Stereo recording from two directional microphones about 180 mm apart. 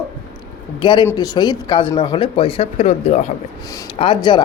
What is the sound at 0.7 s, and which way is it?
Speech, 25° left (ahead or behind).